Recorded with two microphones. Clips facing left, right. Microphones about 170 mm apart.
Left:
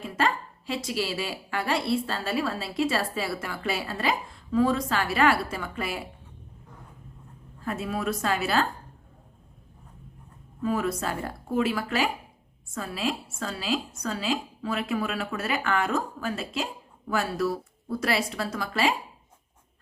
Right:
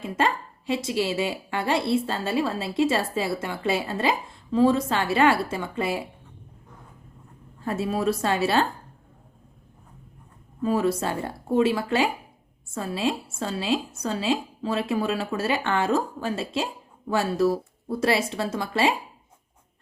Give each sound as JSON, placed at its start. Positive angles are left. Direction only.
{"t": 0.7, "sound": "a woman's voice", "side_deg": -25}
{"t": 7.6, "sound": "a woman's voice", "side_deg": -30}
{"t": 10.6, "sound": "a woman's voice", "side_deg": -30}